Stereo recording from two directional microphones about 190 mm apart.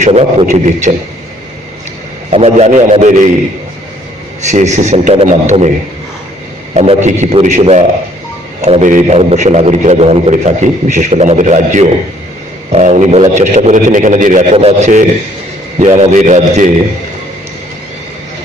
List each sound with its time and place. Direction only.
0.0 s a man's voice: 35° right (ahead or behind)
2.3 s a man's voice: 35° right (ahead or behind)
4.5 s a man's voice: 35° right (ahead or behind)
6.7 s a man's voice: 35° right (ahead or behind)